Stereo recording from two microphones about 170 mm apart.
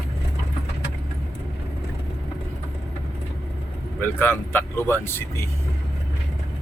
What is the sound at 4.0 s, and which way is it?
Speech, 10° left (ahead or behind).